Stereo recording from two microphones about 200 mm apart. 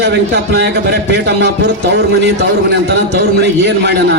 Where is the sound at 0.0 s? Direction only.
55° right (ahead or behind).